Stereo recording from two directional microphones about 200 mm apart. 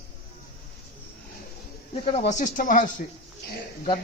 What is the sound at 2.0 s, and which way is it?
Speech, 30° left (ahead or behind).